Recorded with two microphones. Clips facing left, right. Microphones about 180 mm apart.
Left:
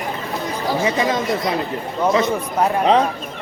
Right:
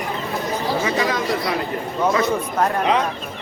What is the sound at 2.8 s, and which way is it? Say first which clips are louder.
Speech: left 7 dB; 30° left (ahead or behind).